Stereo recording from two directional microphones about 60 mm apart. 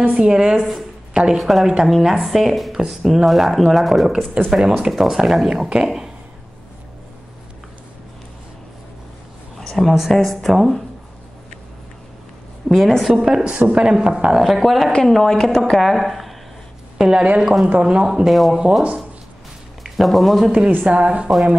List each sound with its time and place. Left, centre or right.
0.0 s a woman's voice: centre
9.6 s a woman's voice: centre
12.6 s a woman's voice: centre
13.2 s speech: centre
14.4 s a woman's voice: centre
17.0 s a woman's voice: centre
18.6 s speech: centre
19.8 s speech: centre
20.7 s a woman's voice: right